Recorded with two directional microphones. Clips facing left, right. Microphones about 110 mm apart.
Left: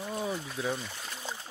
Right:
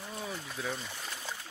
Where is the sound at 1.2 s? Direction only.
25° left (ahead or behind).